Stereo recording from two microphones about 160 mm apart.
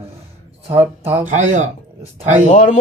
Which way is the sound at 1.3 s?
50° right (ahead or behind).